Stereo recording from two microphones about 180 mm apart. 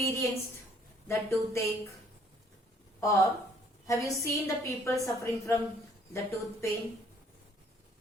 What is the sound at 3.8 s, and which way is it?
A woman's voice, 15° left (ahead or behind).